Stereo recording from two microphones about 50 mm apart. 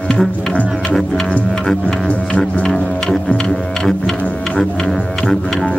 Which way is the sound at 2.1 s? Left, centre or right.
Left.